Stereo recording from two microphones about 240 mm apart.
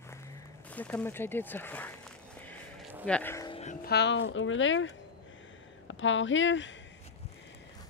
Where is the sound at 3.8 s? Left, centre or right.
Left.